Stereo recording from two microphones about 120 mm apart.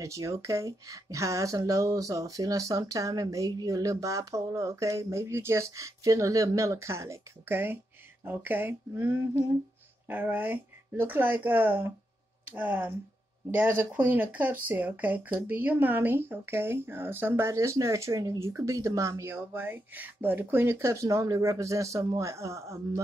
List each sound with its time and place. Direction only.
0.0 s speech: 25° right (ahead or behind)